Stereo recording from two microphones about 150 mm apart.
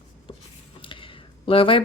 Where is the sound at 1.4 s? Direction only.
35° left (ahead or behind).